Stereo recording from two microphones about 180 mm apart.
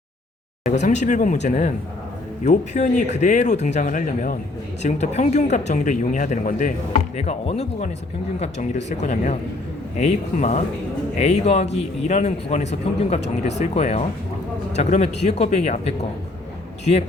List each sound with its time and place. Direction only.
0.6 s a man's voice: 40° left (ahead or behind)
7.2 s a man's voice: 35° left (ahead or behind)